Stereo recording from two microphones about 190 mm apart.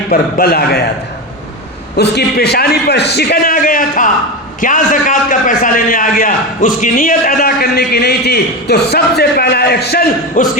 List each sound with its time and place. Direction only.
0.1 s a man's voice: 55° left (ahead or behind)
2.0 s a man's voice: 60° left (ahead or behind)